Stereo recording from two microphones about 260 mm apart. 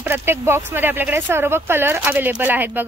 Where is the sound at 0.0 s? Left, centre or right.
Centre.